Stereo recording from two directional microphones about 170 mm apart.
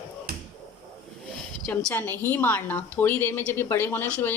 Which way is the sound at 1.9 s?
10° left (ahead or behind).